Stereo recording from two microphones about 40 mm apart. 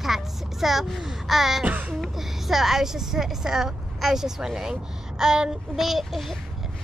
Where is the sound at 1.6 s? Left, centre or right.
Right.